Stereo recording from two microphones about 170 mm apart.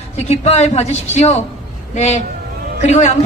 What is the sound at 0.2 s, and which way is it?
Speech, 40° left (ahead or behind).